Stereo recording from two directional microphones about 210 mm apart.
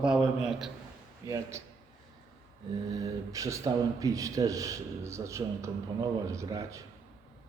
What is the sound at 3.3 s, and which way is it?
A man's voice, 15° right (ahead or behind).